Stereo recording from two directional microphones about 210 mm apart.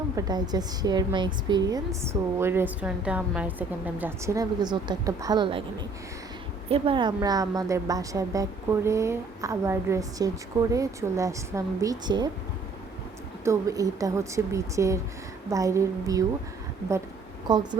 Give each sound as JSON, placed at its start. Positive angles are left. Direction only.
{"t": 0.2, "sound": "a woman's voice", "side_deg": -20}
{"t": 6.7, "sound": "a woman's voice", "side_deg": -25}
{"t": 13.4, "sound": "a woman's voice", "side_deg": -15}
{"t": 17.5, "sound": "a woman's voice", "side_deg": -20}